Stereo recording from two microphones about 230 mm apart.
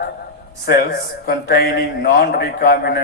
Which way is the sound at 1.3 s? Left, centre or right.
Left.